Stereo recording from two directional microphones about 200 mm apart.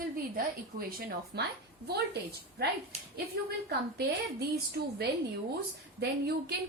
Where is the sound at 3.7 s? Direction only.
50° right (ahead or behind).